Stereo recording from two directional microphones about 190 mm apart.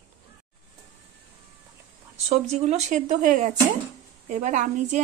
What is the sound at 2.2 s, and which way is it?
A woman's voice, 35° right (ahead or behind).